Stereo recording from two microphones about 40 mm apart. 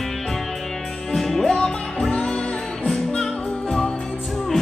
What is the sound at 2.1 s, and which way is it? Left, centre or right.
Music, left.